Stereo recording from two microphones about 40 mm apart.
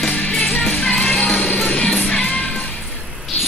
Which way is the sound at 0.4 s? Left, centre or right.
Left.